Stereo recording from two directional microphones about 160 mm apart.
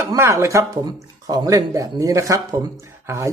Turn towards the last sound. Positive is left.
turn(degrees=-20)  # may be behind; listen again after turning